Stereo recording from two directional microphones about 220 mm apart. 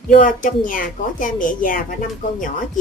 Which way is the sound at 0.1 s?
35° left (ahead or behind).